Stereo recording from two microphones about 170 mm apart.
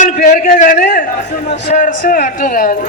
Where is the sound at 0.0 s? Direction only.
45° left (ahead or behind).